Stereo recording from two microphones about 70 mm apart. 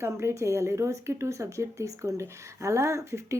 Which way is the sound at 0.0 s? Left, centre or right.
Right.